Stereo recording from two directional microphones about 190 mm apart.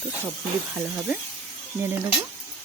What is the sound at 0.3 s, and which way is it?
Speech, 5° right (ahead or behind).